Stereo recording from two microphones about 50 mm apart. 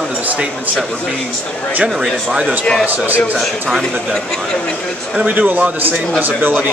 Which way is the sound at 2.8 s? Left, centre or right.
Right.